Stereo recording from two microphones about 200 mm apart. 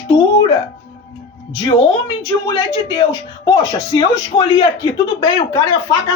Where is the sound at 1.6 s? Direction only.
25° left (ahead or behind).